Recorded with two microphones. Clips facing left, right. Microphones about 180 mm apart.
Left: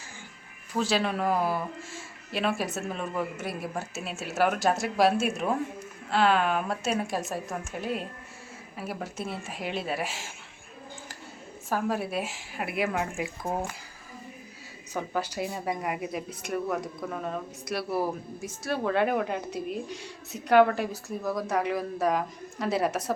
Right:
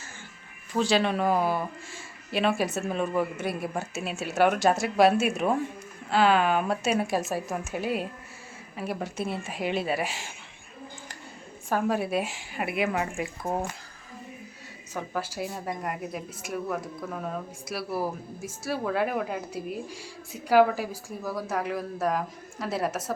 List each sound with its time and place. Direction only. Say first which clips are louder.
0.7 s a man's voice: right 3 dB; 5° left (ahead or behind)
11.7 s a man's voice: right 3 dB; centre (ahead or behind)
14.9 s a man's voice: left 2 dB; centre (ahead or behind)